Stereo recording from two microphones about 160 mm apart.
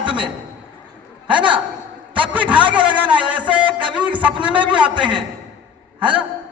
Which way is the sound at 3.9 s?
10° right (ahead or behind).